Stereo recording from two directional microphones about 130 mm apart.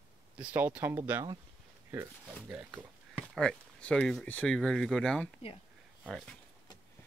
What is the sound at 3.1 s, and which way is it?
Speech, 10° left (ahead or behind).